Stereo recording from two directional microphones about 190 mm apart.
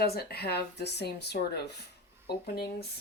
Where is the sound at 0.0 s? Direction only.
55° left (ahead or behind).